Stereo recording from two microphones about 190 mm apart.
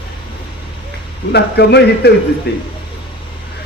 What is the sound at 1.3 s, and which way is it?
A man's voice, 60° left (ahead or behind).